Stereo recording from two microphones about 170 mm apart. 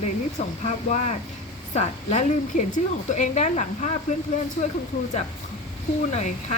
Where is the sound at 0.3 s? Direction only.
45° left (ahead or behind).